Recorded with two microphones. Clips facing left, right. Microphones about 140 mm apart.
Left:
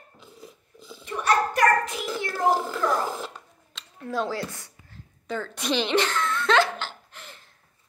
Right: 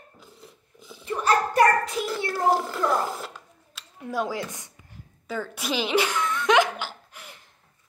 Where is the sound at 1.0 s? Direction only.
30° right (ahead or behind).